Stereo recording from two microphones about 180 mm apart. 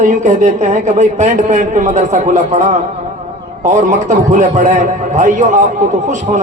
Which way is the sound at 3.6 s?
45° right (ahead or behind).